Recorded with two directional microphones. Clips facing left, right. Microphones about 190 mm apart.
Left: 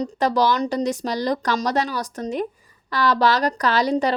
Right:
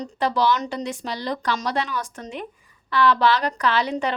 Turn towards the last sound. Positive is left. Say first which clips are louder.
# left 3 dB
turn(degrees=40)  # may be behind; listen again after turning